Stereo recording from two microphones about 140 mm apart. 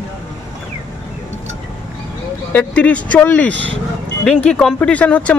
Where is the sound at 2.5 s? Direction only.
10° left (ahead or behind).